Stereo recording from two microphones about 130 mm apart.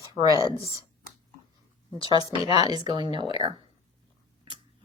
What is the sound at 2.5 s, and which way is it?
Speech, 30° right (ahead or behind).